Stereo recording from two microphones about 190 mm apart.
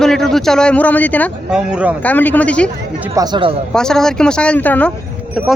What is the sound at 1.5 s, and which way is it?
Speech, 5° right (ahead or behind).